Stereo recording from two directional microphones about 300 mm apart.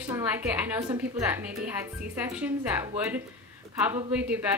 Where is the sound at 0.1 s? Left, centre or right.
Centre.